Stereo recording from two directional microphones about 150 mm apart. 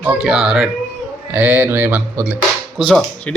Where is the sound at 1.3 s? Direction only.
10° right (ahead or behind).